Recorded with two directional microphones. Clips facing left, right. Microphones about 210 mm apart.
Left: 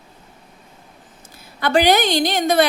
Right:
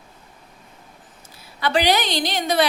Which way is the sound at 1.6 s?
50° left (ahead or behind).